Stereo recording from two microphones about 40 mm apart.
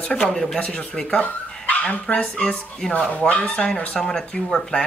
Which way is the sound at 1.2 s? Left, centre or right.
Left.